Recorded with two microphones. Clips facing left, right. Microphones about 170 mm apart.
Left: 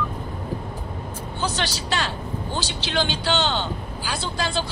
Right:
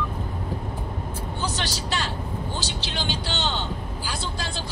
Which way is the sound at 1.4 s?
70° left (ahead or behind).